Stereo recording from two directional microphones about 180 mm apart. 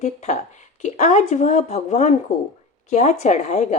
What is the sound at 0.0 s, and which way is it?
Speech, 40° left (ahead or behind).